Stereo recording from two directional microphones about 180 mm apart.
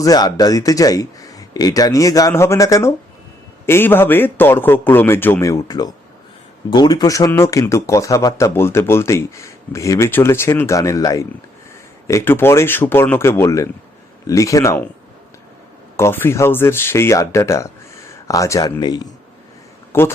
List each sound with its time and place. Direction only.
0.0 s a man's voice: 20° left (ahead or behind)
16.0 s speech: 15° left (ahead or behind)